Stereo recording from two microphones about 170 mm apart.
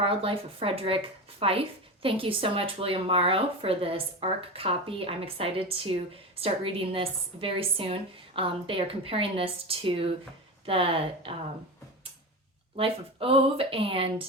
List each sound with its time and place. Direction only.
0.0 s speech: 30° right (ahead or behind)
12.7 s speech: 35° right (ahead or behind)